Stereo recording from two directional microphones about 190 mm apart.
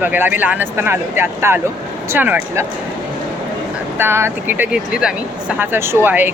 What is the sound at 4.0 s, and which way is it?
Speech, 10° right (ahead or behind).